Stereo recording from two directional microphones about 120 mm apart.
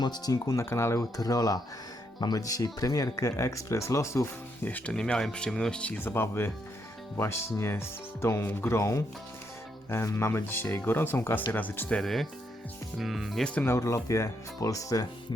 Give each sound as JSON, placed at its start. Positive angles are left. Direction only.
{"t": 0.0, "sound": "speech", "side_deg": 35}
{"t": 13.7, "sound": "speech", "side_deg": 25}